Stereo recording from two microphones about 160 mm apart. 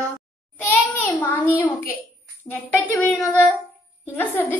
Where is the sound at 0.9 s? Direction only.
10° left (ahead or behind).